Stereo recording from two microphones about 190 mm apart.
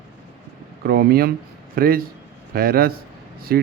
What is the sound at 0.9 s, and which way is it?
Speech, 50° right (ahead or behind).